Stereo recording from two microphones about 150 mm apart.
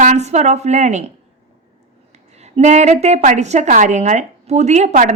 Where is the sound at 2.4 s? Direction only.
50° right (ahead or behind).